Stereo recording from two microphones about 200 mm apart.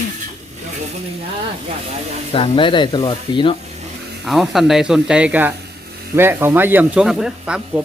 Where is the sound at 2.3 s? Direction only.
25° left (ahead or behind).